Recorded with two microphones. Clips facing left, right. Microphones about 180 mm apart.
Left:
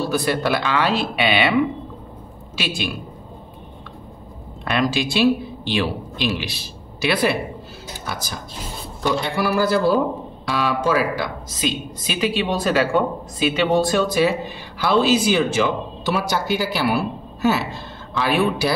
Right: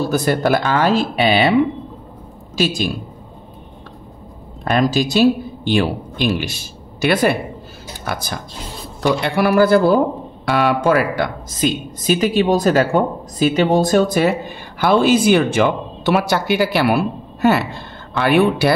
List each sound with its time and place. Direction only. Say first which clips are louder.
0.1 s speech: right 4 dB; 45° right (ahead or behind)
2.5 s speech: right 7 dB; 40° right (ahead or behind)
4.6 s a man's voice: right 4 dB; 40° right (ahead or behind); by 18.7 s 60° right (ahead or behind)